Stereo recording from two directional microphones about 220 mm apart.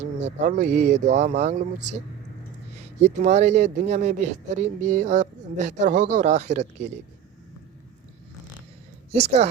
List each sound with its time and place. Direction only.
0.0 s speech: 30° right (ahead or behind)
3.0 s speech: 30° right (ahead or behind)
9.1 s a woman's voice: 30° right (ahead or behind)